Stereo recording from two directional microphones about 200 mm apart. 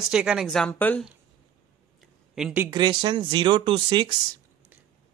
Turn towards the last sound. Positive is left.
turn(degrees=-25)  # may be behind; listen again after turning